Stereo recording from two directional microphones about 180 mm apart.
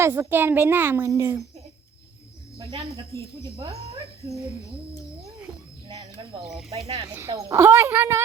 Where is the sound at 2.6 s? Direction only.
35° right (ahead or behind).